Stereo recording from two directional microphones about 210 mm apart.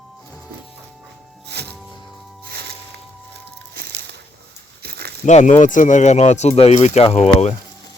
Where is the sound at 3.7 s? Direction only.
45° right (ahead or behind).